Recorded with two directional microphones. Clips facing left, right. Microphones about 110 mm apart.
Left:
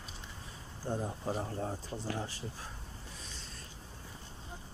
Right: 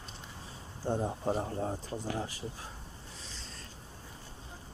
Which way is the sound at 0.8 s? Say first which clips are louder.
Right 4 dB; 25° right (ahead or behind).